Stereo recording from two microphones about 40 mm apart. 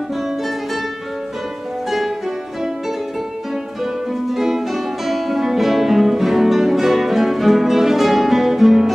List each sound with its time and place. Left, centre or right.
1.9 s music: centre
3.8 s music: centre